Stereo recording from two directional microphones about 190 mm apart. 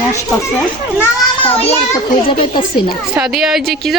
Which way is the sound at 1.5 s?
35° left (ahead or behind).